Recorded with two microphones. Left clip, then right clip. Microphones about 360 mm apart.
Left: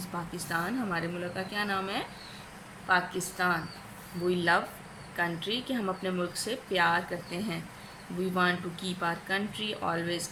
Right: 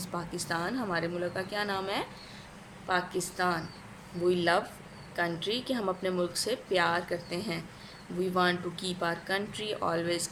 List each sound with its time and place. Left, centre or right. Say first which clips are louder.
0.3 s a woman's voice: left 1 dB; centre